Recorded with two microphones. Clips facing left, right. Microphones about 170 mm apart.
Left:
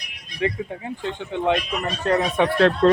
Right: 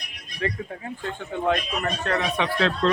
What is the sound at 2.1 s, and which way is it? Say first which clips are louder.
Speech: left 7 dB; 40° left (ahead or behind).